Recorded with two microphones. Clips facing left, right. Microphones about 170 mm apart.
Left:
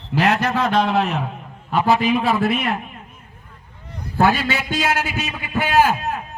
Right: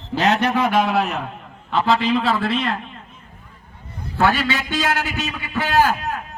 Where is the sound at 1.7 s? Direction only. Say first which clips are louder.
Left 1 dB; 15° left (ahead or behind).